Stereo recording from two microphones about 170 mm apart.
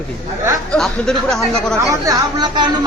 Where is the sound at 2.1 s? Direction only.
20° right (ahead or behind).